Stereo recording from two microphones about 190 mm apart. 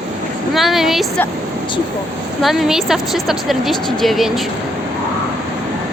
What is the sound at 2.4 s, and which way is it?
A woman's voice, centre (ahead or behind).